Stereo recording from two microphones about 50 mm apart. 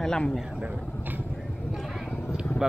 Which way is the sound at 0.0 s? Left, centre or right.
Centre.